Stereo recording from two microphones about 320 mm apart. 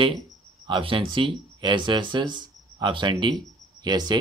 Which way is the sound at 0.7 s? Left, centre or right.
Centre.